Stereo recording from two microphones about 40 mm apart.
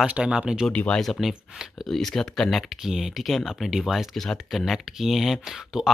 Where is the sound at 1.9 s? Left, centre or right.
Centre.